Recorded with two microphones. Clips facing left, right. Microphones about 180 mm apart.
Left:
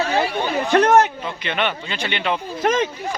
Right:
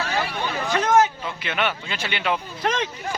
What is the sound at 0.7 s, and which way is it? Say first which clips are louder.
Speech: left 4 dB; 65° left (ahead or behind).